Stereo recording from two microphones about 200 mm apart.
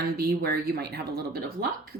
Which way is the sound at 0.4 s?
50° right (ahead or behind).